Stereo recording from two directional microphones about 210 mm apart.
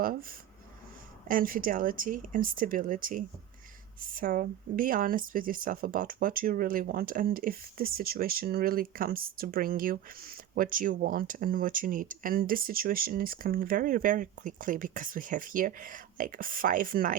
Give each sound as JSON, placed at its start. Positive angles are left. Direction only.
{"t": 0.0, "sound": "speech", "side_deg": -45}